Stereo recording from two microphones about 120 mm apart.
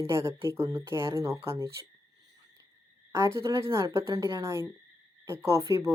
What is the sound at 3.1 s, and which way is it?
Speech, 25° right (ahead or behind).